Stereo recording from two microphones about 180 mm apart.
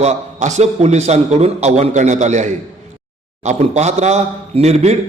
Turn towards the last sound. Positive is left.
turn(degrees=-35)  # may be behind; listen again after turning